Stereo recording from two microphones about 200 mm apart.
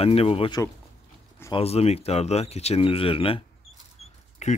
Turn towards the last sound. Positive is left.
turn(degrees=35)  # may be behind; listen again after turning